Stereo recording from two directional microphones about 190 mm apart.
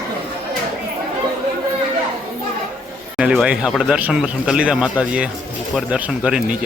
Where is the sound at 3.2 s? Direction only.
5° right (ahead or behind).